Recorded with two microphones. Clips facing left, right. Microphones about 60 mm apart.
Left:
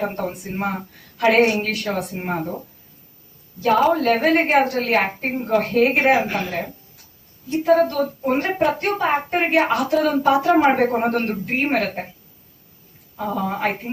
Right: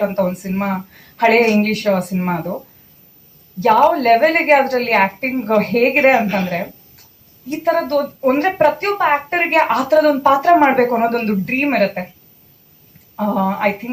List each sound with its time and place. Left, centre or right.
0.0 s a woman's voice: right
3.8 s a woman's voice: right
13.1 s a woman's voice: right